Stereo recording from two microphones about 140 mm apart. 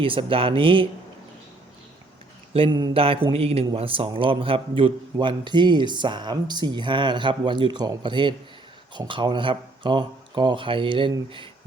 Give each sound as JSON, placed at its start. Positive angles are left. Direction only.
{"t": 0.0, "sound": "a man's voice", "side_deg": -40}
{"t": 2.6, "sound": "a sound", "side_deg": -30}
{"t": 2.9, "sound": "a man's voice", "side_deg": -40}